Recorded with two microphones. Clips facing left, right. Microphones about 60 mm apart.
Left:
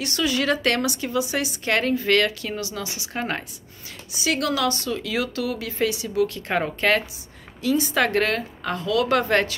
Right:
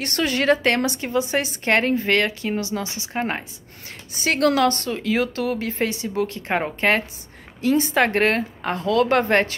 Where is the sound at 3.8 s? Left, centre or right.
Right.